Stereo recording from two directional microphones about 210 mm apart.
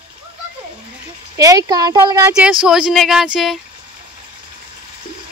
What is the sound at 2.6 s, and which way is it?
Speech, 5° right (ahead or behind).